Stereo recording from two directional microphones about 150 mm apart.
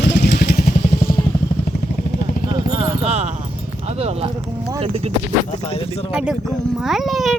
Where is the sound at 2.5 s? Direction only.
35° right (ahead or behind).